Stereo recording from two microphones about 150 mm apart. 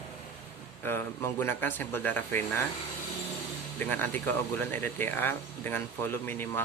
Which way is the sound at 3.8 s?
15° left (ahead or behind).